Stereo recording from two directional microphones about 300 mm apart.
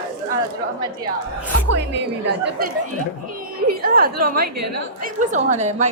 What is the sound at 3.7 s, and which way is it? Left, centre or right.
A woman's voice, right.